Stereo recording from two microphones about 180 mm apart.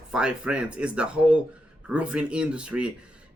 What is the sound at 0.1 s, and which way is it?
Speech, 5° right (ahead or behind).